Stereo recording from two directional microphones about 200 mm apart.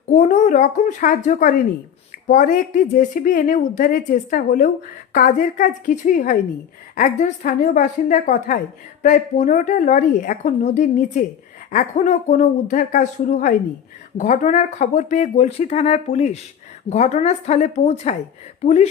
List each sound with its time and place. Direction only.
0.1 s a woman's voice: 35° left (ahead or behind)